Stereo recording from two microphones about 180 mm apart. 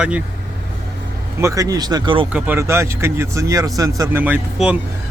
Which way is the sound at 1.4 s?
15° right (ahead or behind).